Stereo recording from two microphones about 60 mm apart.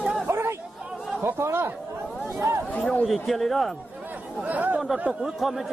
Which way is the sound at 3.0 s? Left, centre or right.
Centre.